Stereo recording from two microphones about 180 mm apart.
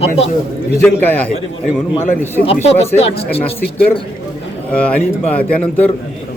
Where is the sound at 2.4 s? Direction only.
35° left (ahead or behind).